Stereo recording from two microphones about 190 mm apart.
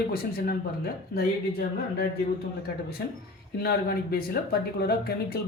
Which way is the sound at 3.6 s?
50° left (ahead or behind).